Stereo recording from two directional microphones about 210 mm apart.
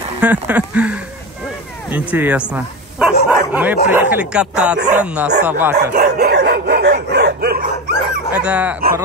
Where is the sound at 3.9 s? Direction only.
5° right (ahead or behind).